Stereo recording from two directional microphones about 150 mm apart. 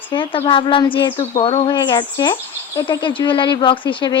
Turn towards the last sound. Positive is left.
turn(degrees=30)  # may be behind; listen again after turning